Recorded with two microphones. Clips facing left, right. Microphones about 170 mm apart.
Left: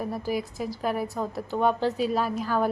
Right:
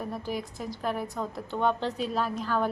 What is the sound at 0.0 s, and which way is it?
A woman's voice, 10° left (ahead or behind).